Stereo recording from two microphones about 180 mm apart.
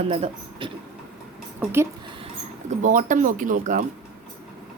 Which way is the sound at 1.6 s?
15° right (ahead or behind).